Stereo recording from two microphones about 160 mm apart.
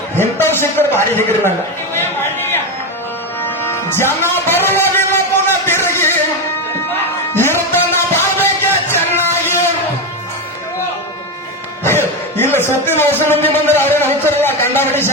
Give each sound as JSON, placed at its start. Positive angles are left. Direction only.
{"t": 0.2, "sound": "a man's voice", "side_deg": 15}
{"t": 2.0, "sound": "chatter", "side_deg": 15}
{"t": 3.4, "sound": "music", "side_deg": 15}
{"t": 7.3, "sound": "music", "side_deg": 15}
{"t": 11.8, "sound": "speech", "side_deg": 15}